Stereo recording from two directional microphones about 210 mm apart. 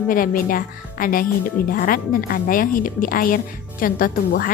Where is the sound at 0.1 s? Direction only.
40° left (ahead or behind).